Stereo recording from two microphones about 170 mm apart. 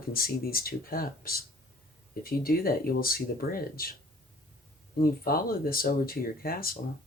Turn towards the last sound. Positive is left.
turn(degrees=60)  # may be behind; listen again after turning